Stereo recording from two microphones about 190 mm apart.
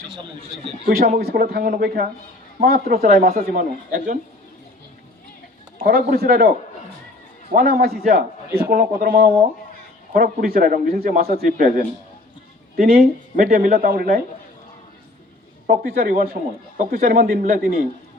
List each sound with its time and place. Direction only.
0.6 s a man's voice: 50° right (ahead or behind)
5.8 s a man's voice: 50° right (ahead or behind)
7.5 s a man's voice: 50° right (ahead or behind)
15.6 s a man's voice: 50° right (ahead or behind)